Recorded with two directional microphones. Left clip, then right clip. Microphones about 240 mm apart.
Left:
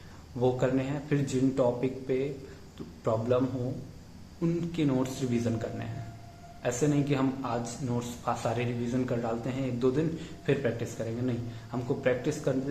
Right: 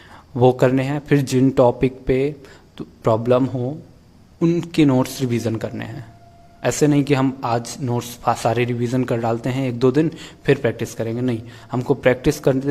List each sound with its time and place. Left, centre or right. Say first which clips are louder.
0.3 s a man's voice: right 12 dB; right